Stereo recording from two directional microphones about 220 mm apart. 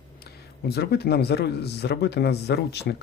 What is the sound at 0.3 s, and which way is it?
Speech, 45° left (ahead or behind).